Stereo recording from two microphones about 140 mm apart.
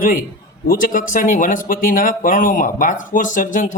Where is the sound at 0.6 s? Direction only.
85° left.